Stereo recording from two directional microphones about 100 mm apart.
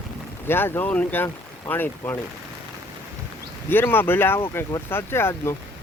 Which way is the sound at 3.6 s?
20° left (ahead or behind).